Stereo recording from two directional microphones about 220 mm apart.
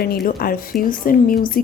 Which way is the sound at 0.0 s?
40° left (ahead or behind).